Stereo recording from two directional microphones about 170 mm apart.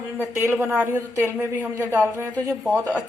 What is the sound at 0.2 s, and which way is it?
A woman's voice, 15° right (ahead or behind).